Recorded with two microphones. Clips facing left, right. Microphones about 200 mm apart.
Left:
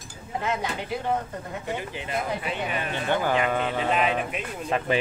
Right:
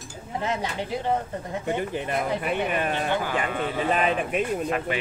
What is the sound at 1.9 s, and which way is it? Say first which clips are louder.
Speech: right 3 dB; 50° right (ahead or behind).